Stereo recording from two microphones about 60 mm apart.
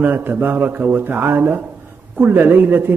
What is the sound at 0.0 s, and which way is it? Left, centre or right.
Speech, right.